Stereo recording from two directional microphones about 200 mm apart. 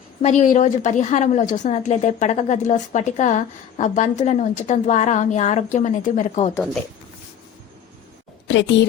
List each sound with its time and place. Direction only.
0.2 s a woman's voice: 35° left (ahead or behind)
8.4 s a woman's voice: 65° left (ahead or behind)